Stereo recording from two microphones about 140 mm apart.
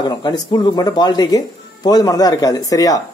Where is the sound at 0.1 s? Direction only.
30° left (ahead or behind).